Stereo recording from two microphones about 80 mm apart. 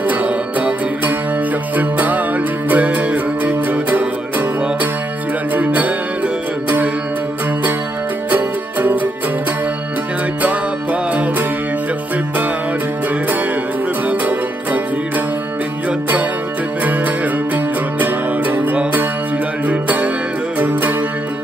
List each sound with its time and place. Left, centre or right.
0.1 s music: centre
5.5 s music: centre
8.3 s music: centre
10.4 s music: centre
14.0 s music: centre
17.9 s music: centre